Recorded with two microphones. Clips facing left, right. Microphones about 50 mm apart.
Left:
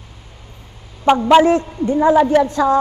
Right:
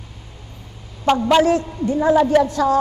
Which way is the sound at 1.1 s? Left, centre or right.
Centre.